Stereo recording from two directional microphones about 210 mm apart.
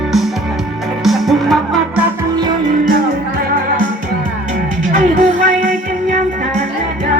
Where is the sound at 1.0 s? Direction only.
Centre (ahead or behind).